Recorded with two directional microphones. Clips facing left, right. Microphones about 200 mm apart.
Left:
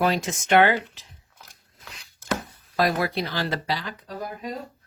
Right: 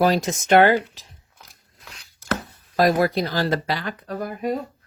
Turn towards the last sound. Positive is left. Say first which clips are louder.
# right 7 dB
turn(degrees=-60)  # may be behind; listen again after turning